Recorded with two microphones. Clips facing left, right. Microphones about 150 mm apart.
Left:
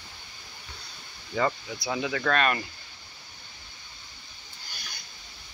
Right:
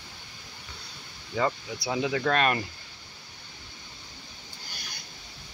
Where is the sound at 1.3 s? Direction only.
10° right (ahead or behind); by 2.5 s 30° right (ahead or behind).